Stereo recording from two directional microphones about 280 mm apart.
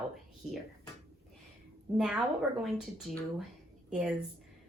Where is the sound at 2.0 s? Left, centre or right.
Centre.